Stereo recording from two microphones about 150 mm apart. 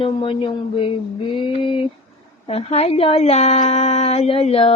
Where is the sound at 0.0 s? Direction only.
35° left (ahead or behind).